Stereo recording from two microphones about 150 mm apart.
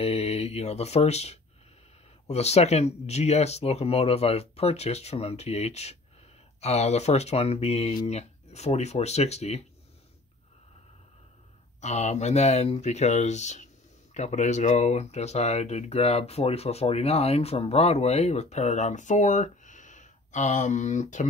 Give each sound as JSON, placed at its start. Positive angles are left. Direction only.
{"t": 0.0, "sound": "speech", "side_deg": 45}
{"t": 11.8, "sound": "speech", "side_deg": 50}